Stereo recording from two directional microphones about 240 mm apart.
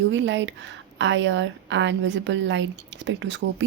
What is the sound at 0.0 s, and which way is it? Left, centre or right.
Speech, right.